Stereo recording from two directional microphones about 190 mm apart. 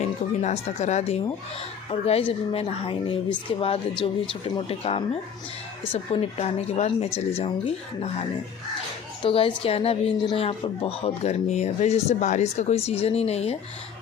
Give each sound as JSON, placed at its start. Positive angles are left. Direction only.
{"t": 0.0, "sound": "speech", "side_deg": 35}